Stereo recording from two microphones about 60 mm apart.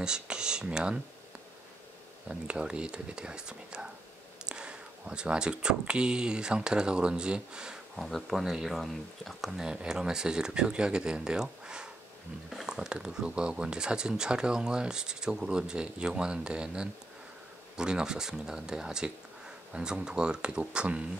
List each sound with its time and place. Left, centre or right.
0.0 s speech: centre
2.2 s speech: centre
9.7 s speech: centre